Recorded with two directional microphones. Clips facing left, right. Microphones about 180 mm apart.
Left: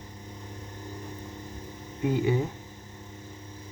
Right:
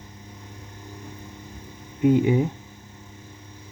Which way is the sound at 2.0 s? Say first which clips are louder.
Right 7 dB; 20° right (ahead or behind).